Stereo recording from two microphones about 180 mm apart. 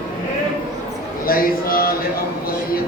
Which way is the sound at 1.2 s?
55° left (ahead or behind).